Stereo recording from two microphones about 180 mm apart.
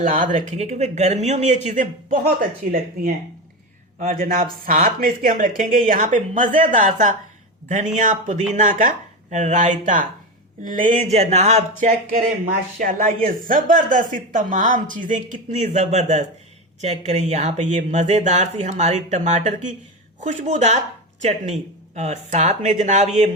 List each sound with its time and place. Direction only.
0.0 s speech: 45° right (ahead or behind)
12.8 s speech: 50° right (ahead or behind)